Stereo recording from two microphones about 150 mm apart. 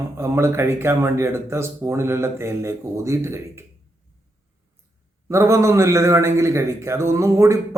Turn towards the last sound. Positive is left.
turn(degrees=-20)  # may be behind; listen again after turning